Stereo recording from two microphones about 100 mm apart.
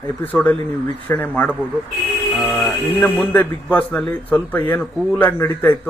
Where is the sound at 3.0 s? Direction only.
15° left (ahead or behind).